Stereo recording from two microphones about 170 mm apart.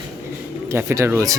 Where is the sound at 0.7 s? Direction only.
15° right (ahead or behind).